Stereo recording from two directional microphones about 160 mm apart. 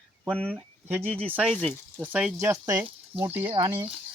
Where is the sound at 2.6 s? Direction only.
20° right (ahead or behind).